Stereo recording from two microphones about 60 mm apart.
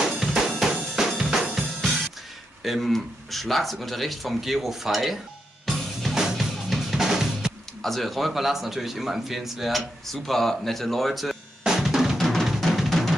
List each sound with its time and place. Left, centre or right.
0.2 s drum: centre
2.6 s speech: centre
5.7 s drum kit: centre
6.2 s music: centre
7.8 s speech: centre
11.6 s drum kit: centre
12.2 s music: centre